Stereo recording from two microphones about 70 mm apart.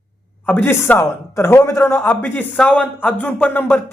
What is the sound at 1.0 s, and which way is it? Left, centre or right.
A man's voice, left.